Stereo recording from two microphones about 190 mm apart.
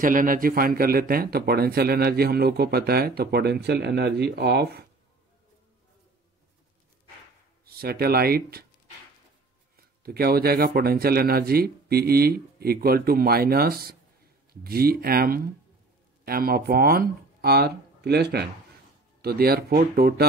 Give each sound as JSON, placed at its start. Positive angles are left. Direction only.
{"t": 0.0, "sound": "a man's voice", "side_deg": -45}
{"t": 7.6, "sound": "a man's voice", "side_deg": -55}
{"t": 9.8, "sound": "a man's voice", "side_deg": -55}